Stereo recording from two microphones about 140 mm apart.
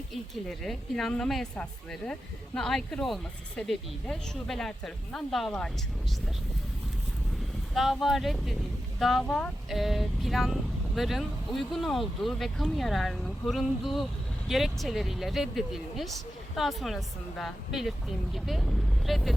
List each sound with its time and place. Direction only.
0.1 s speech: centre (ahead or behind)
7.7 s speech: centre (ahead or behind)